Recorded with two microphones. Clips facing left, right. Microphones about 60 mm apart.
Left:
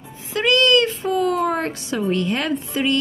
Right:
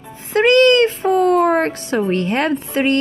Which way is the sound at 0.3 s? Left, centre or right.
Right.